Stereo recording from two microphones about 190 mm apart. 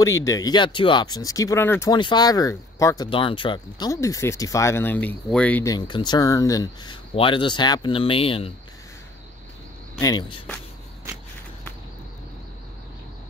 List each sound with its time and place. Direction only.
0.0 s speech: 15° left (ahead or behind)
9.9 s speech: 20° left (ahead or behind)